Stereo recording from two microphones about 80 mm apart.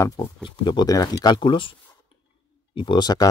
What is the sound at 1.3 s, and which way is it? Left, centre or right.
Speech, left.